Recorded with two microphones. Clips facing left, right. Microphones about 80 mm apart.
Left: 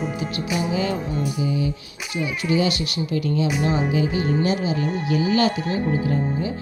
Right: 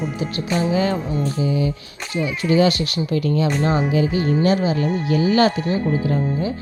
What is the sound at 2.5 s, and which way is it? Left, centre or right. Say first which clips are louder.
Speech: right 5 dB; right.